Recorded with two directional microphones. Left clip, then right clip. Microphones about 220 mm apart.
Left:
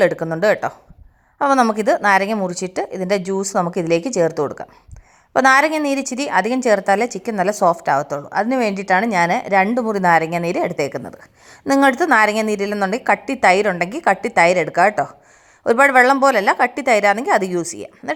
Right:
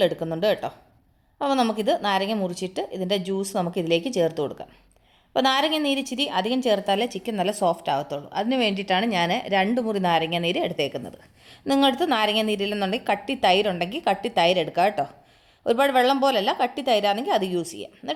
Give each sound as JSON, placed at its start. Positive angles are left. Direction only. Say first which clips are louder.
{"t": 0.3, "sound": "a woman's voice", "louder": "left 7 dB", "side_deg": 10}
{"t": 4.3, "sound": "a woman's voice", "louder": "left 6 dB", "side_deg": 25}
{"t": 5.3, "sound": "a woman's voice", "louder": "left 8 dB", "side_deg": 10}
{"t": 7.5, "sound": "a woman's voice", "louder": "left 8 dB", "side_deg": 25}
{"t": 8.3, "sound": "a woman's voice", "louder": "left 5 dB", "side_deg": 5}
{"t": 9.2, "sound": "a woman's voice", "louder": "left 7 dB", "side_deg": 25}
{"t": 10.0, "sound": "a woman's voice", "louder": "left 8 dB", "side_deg": 10}
{"t": 11.6, "sound": "a woman's voice", "louder": "left 6 dB", "side_deg": 15}